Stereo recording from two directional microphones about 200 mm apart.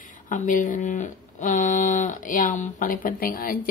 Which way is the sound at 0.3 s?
40° left (ahead or behind).